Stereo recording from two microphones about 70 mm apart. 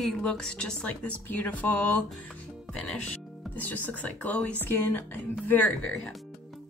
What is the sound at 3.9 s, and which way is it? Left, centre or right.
Speech, left.